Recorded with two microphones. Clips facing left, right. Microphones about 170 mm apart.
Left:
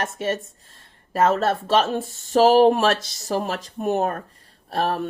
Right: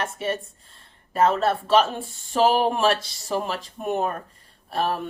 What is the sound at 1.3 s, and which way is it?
Speech, 40° left (ahead or behind).